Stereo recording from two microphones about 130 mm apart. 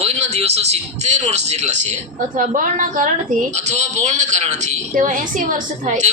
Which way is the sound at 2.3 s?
75° right (ahead or behind).